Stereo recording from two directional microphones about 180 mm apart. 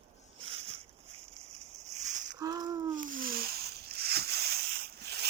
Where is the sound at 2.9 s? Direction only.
50° right (ahead or behind).